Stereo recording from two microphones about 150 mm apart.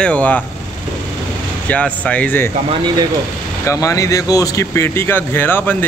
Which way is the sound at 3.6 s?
20° left (ahead or behind).